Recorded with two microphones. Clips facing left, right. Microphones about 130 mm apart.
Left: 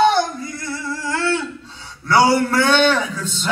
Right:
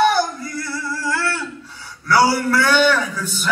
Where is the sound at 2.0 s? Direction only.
20° left (ahead or behind).